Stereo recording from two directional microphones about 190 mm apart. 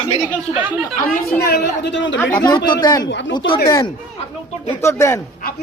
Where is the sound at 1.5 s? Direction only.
65° left (ahead or behind).